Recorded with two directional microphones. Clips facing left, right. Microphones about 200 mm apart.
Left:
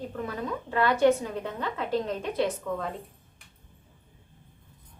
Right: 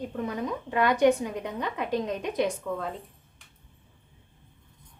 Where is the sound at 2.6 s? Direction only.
Centre (ahead or behind).